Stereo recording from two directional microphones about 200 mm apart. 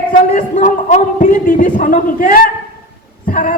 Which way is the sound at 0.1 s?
40° left (ahead or behind).